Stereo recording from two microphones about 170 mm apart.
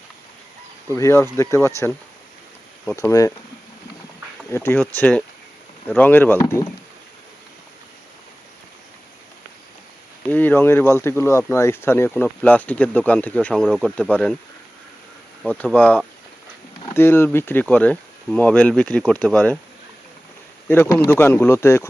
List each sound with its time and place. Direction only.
0.9 s speech: 15° left (ahead or behind)
2.9 s speech: 20° left (ahead or behind)
4.5 s speech: 10° left (ahead or behind)
10.2 s speech: 10° left (ahead or behind)
15.4 s speech: 10° left (ahead or behind)
20.7 s speech: 10° left (ahead or behind)